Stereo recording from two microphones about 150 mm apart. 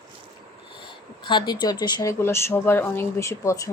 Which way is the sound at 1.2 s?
30° left (ahead or behind).